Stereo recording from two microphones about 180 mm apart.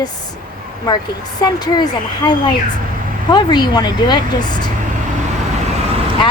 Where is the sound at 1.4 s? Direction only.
25° left (ahead or behind).